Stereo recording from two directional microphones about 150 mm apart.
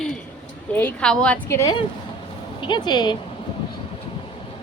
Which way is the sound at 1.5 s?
20° left (ahead or behind).